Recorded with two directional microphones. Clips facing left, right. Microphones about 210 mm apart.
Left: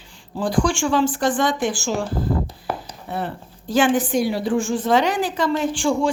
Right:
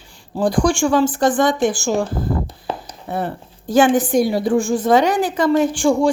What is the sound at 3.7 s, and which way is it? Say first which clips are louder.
A woman's voice: right 4 dB; 45° right (ahead or behind).